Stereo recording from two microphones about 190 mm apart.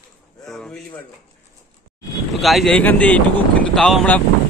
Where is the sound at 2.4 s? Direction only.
Centre (ahead or behind).